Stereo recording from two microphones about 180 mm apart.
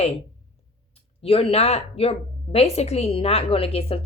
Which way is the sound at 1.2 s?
35° left (ahead or behind).